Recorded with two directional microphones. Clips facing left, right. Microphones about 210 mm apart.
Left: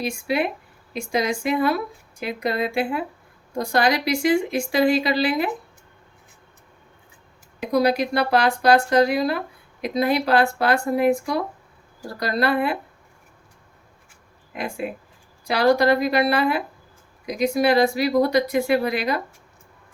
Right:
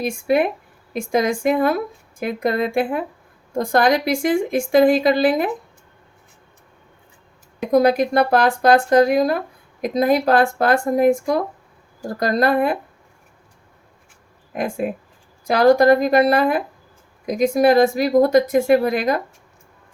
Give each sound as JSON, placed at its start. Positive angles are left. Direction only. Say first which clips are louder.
{"t": 0.0, "sound": "speech", "louder": "right 5 dB", "side_deg": -50}
{"t": 7.7, "sound": "speech", "louder": "right 4 dB", "side_deg": -50}
{"t": 14.5, "sound": "speech", "louder": "right 5 dB", "side_deg": -45}